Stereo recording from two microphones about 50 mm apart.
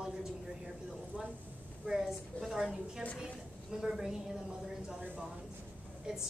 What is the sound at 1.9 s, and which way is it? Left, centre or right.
Speech, centre.